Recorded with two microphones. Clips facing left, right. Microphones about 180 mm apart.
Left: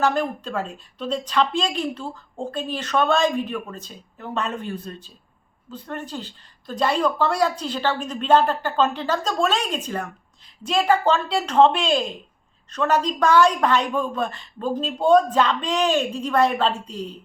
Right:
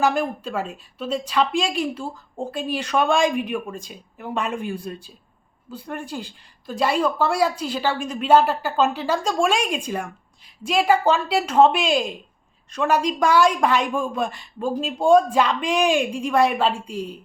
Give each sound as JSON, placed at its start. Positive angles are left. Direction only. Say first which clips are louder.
{"t": 0.0, "sound": "a woman's voice", "louder": "right 1 dB", "side_deg": -10}